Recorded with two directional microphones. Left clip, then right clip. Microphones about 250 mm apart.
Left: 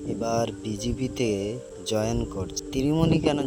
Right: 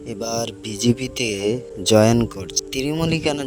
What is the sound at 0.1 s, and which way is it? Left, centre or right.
Speech, right.